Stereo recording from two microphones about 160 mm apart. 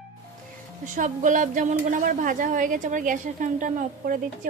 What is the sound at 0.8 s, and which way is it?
A woman's voice, 50° right (ahead or behind).